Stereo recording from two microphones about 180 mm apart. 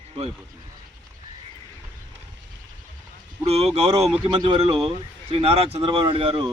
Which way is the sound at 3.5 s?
35° right (ahead or behind).